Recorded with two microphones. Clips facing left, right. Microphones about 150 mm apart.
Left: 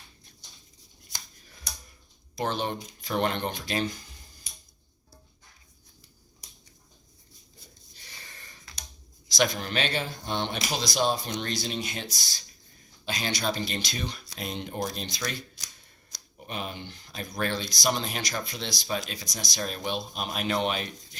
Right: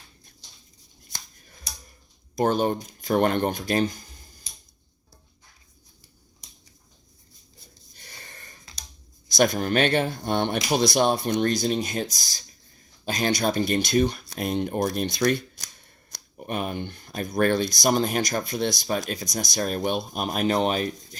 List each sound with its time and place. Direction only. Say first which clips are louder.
2.3 s speech: right 8 dB; 45° right (ahead or behind)
7.9 s a sound: right 4 dB; 50° right (ahead or behind)
9.3 s speech: right 6 dB; 50° right (ahead or behind)